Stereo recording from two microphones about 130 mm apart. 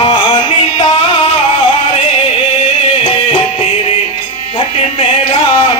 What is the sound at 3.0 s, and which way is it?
Music, 40° left (ahead or behind).